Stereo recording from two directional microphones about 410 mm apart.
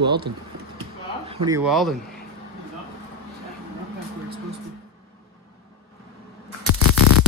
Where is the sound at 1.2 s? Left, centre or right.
Centre.